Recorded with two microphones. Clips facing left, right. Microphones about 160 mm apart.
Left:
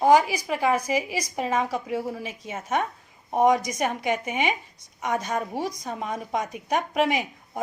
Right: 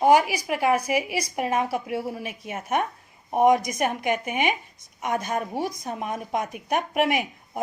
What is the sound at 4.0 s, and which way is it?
Speech, 25° left (ahead or behind).